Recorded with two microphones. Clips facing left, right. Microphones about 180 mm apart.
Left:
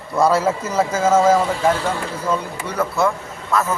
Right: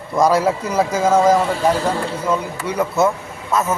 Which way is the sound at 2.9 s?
20° right (ahead or behind).